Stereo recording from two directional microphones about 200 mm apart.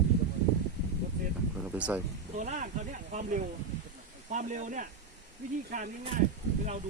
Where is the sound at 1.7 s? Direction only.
5° right (ahead or behind).